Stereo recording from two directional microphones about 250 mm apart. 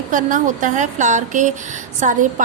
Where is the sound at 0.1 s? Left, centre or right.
Right.